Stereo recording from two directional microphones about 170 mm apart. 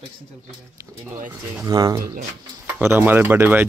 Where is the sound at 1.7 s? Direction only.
20° right (ahead or behind).